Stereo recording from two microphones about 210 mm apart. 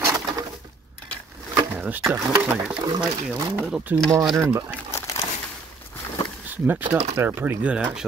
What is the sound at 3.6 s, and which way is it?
Speech, 5° right (ahead or behind).